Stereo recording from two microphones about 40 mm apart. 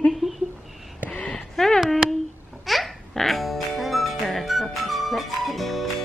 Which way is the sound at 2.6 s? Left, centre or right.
Centre.